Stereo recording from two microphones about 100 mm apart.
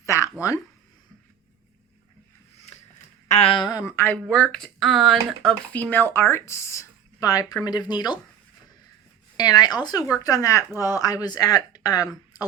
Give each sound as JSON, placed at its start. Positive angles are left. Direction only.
{"t": 0.0, "sound": "a sound", "side_deg": 30}
{"t": 3.3, "sound": "a sound", "side_deg": 75}
{"t": 3.6, "sound": "speech", "side_deg": 40}
{"t": 3.8, "sound": "speech", "side_deg": 25}
{"t": 4.4, "sound": "speech", "side_deg": 0}
{"t": 5.7, "sound": "speech", "side_deg": 15}
{"t": 9.4, "sound": "speech", "side_deg": 40}